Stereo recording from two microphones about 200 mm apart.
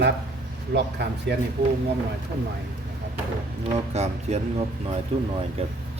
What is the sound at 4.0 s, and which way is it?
Speech, 30° right (ahead or behind).